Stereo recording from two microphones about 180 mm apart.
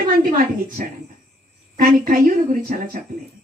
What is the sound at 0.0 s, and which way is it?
Female singing, 50° right (ahead or behind).